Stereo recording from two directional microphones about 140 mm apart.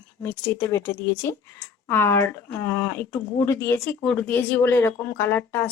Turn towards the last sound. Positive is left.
turn(degrees=15)  # may be behind; listen again after turning